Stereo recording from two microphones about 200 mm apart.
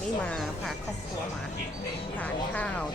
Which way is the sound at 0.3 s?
5° left (ahead or behind).